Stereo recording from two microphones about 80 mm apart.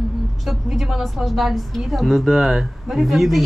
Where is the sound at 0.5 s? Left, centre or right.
Centre.